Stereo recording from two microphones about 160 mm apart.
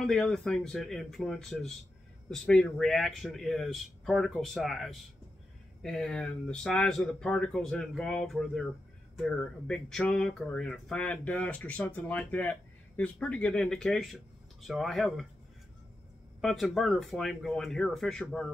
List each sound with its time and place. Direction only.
0.0 s speech: 5° left (ahead or behind)
16.3 s speech: centre (ahead or behind)